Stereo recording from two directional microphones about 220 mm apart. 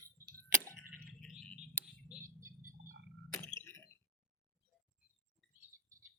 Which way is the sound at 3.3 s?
10° left (ahead or behind).